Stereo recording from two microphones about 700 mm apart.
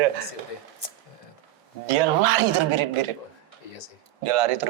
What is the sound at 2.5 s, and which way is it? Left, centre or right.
Speech, right.